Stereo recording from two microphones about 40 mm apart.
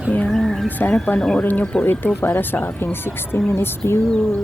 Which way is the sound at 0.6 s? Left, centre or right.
Left.